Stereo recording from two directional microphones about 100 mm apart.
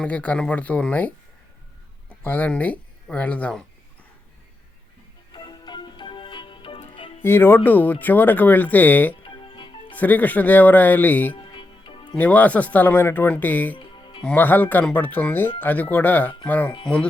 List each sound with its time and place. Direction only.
0.0 s speech: 15° left (ahead or behind)
5.3 s music: 45° left (ahead or behind); by 7.2 s 70° left (ahead or behind)
7.2 s speech: 20° left (ahead or behind)
9.2 s music: 55° left (ahead or behind)
9.9 s speech: 15° left (ahead or behind)
11.5 s music: 55° left (ahead or behind)
12.1 s speech: 15° left (ahead or behind)
13.7 s music: 55° left (ahead or behind)
14.3 s speech: 20° left (ahead or behind)